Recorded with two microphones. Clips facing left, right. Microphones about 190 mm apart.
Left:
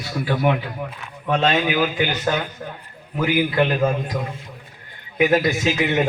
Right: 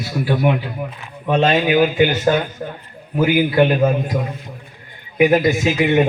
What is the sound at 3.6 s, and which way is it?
Speech, 20° right (ahead or behind).